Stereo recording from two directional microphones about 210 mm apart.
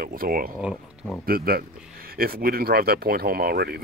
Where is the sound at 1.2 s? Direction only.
45° right (ahead or behind).